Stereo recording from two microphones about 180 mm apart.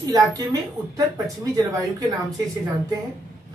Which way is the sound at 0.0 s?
20° right (ahead or behind).